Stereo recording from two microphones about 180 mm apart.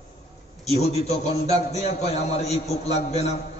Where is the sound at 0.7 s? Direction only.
35° left (ahead or behind).